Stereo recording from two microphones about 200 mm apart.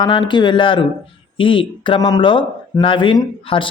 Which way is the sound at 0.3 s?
25° left (ahead or behind).